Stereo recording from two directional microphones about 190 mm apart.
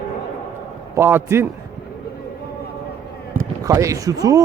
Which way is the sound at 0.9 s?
10° right (ahead or behind).